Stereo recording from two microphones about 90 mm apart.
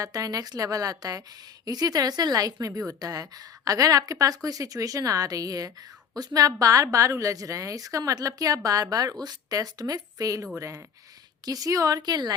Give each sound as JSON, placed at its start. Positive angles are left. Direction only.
{"t": 0.0, "sound": "a woman's voice", "side_deg": -45}